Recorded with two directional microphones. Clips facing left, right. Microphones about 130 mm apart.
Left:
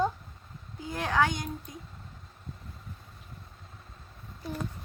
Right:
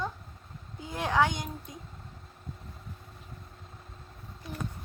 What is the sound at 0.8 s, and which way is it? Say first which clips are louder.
Speech: right 1 dB; 20° right (ahead or behind).